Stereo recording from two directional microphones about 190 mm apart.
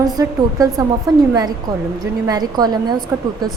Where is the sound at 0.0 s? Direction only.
20° right (ahead or behind).